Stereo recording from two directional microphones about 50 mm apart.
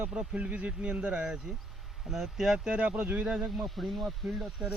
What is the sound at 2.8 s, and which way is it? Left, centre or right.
Speech, right.